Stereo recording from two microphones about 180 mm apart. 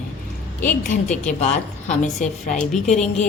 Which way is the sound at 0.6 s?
45° left (ahead or behind).